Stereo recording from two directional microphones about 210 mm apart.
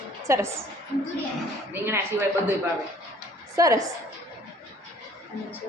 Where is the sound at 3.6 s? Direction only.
15° right (ahead or behind).